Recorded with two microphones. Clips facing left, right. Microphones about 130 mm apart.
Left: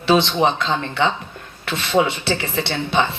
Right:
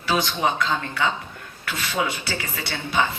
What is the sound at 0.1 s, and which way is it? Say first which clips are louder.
Speech: left 7 dB; 25° left (ahead or behind).